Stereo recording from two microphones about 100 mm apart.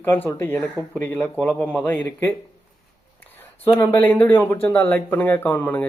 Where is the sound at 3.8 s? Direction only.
20° left (ahead or behind).